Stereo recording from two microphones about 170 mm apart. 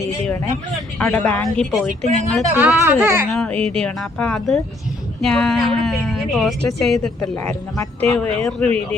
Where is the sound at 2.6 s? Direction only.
15° right (ahead or behind).